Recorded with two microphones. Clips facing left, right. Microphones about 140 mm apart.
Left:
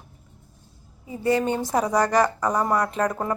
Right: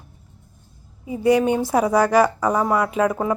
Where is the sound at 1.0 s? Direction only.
15° right (ahead or behind).